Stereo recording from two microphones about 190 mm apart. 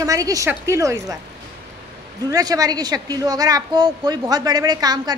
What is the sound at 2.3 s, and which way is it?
A woman's voice, 20° right (ahead or behind).